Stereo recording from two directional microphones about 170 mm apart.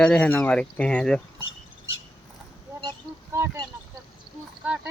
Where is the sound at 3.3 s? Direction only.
15° right (ahead or behind).